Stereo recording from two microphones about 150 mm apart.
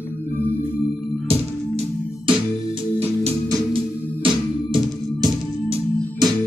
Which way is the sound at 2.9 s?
45° right (ahead or behind).